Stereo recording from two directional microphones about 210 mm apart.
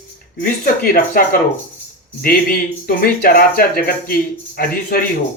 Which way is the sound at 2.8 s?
45° left (ahead or behind).